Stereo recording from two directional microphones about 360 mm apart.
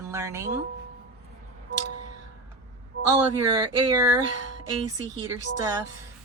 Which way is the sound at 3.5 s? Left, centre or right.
Centre.